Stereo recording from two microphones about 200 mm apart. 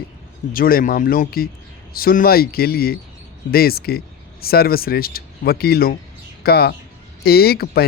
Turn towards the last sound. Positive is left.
turn(degrees=50)  # may be behind; listen again after turning